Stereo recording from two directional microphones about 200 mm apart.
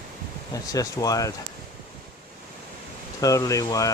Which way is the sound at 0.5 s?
15° left (ahead or behind).